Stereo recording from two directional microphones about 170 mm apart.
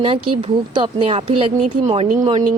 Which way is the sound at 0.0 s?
30° right (ahead or behind).